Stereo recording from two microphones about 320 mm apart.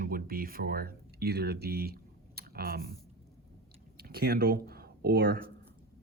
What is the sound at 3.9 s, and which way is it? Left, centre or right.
Speech, right.